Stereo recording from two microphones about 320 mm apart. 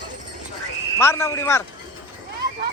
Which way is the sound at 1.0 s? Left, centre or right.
Centre.